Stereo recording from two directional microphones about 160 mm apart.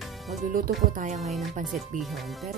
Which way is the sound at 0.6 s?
50° right (ahead or behind).